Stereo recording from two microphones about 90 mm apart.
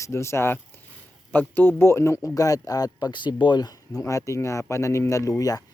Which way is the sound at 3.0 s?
55° left (ahead or behind).